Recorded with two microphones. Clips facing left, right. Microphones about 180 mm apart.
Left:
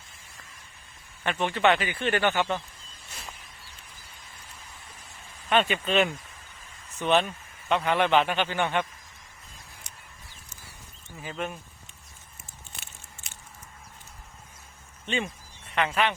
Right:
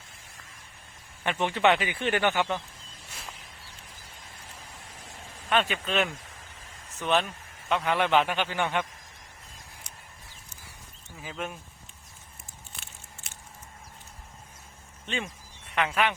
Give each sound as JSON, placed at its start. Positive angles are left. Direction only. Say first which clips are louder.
{"t": 1.2, "sound": "speech", "louder": "even", "side_deg": -15}
{"t": 5.5, "sound": "a man's voice", "louder": "left 3 dB", "side_deg": 0}
{"t": 11.2, "sound": "a man's voice", "louder": "left 2 dB", "side_deg": -5}
{"t": 12.8, "sound": "a sound", "louder": "even", "side_deg": 0}
{"t": 15.0, "sound": "speech", "louder": "left 4 dB", "side_deg": 0}